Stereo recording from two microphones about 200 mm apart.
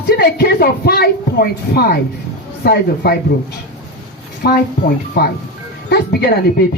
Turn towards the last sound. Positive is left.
turn(degrees=55)  # may be behind; listen again after turning